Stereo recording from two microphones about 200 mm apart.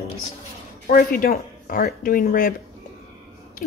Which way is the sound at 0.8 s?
45° left (ahead or behind).